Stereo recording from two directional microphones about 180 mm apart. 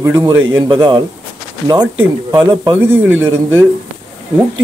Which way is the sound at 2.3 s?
20° right (ahead or behind).